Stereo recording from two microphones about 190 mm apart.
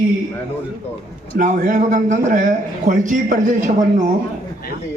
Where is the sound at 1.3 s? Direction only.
45° right (ahead or behind).